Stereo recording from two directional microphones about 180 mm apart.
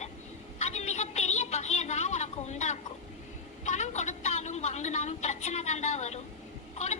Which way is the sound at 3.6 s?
40° left (ahead or behind).